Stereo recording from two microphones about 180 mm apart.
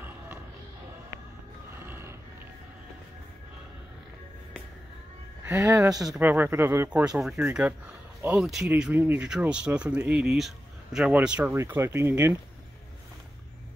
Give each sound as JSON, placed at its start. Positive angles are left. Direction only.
{"t": 1.8, "sound": "roaring cats", "side_deg": -10}
{"t": 5.4, "sound": "speech", "side_deg": -15}